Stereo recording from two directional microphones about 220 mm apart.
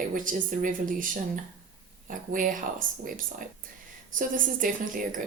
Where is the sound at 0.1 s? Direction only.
35° right (ahead or behind).